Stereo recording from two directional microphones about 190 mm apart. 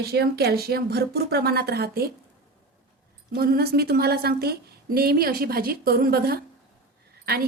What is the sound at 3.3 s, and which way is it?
A woman's voice, 55° right (ahead or behind).